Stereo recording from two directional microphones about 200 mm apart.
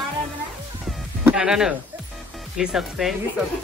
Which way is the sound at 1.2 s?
5° right (ahead or behind).